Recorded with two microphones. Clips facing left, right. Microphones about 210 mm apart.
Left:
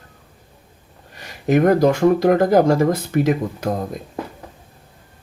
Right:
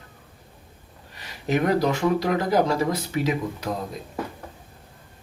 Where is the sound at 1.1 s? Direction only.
50° left (ahead or behind).